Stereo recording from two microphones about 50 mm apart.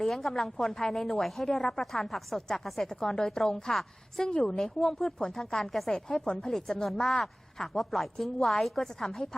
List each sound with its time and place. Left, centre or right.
0.0 s a woman's voice: centre
1.8 s a woman's voice: centre
6.1 s a woman's voice: centre
6.8 s a woman's voice: centre